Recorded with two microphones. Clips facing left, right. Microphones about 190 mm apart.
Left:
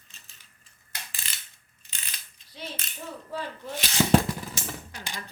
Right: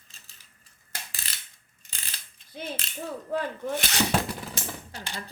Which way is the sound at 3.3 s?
55° right (ahead or behind).